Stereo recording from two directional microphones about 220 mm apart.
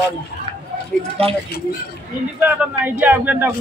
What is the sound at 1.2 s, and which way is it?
Speech, 25° right (ahead or behind).